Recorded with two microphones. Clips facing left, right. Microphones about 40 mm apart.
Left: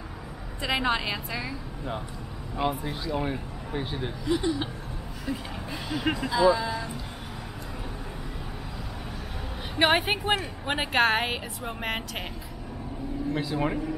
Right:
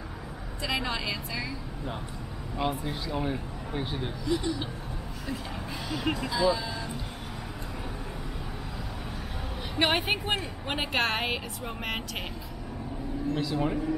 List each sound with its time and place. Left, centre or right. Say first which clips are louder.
0.7 s a woman's voice: left 4 dB; left
2.5 s speech: left 2 dB; centre
4.3 s a woman's voice: left 3 dB; centre
5.7 s a woman's voice: left 2 dB; centre
9.8 s a woman's voice: left 3 dB; centre
13.3 s a woman's voice: left 1 dB; centre